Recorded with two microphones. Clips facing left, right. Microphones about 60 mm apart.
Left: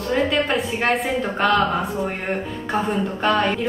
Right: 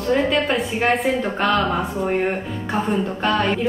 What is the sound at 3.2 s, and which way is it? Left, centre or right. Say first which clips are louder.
Speech: left 1 dB; centre.